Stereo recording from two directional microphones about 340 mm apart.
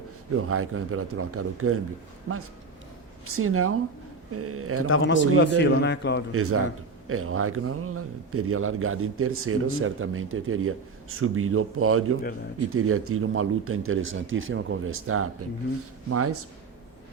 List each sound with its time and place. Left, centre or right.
0.3 s a man's voice: right
4.9 s speech: left
6.3 s a man's voice: right